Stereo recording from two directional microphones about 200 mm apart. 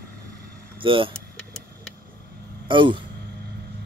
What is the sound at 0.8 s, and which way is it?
Speech, 25° right (ahead or behind).